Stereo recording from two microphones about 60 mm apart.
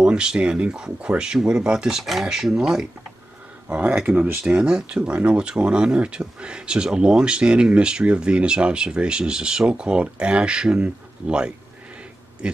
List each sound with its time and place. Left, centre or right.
0.0 s speech: centre
3.6 s speech: right